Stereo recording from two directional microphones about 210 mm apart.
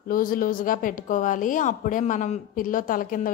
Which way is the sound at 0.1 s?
40° left (ahead or behind).